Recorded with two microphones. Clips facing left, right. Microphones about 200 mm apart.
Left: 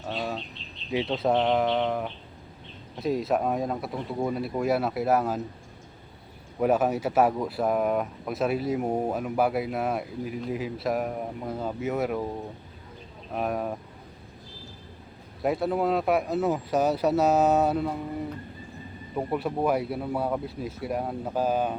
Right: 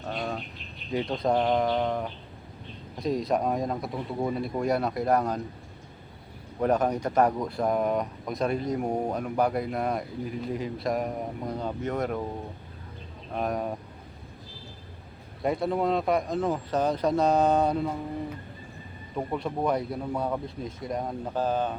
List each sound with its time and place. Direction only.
0.9 s speech: 5° left (ahead or behind)
6.6 s speech: 5° left (ahead or behind)
13.3 s speech: 5° left (ahead or behind)
15.4 s speech: 5° left (ahead or behind)
19.1 s speech: 5° left (ahead or behind)